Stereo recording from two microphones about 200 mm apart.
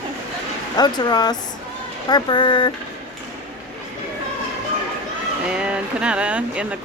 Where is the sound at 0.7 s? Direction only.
20° left (ahead or behind).